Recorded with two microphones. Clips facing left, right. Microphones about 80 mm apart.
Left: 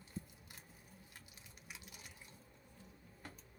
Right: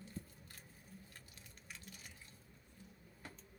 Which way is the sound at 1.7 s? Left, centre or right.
Centre.